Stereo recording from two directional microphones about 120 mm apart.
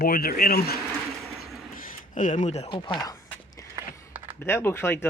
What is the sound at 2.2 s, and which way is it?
Speech, 85° left.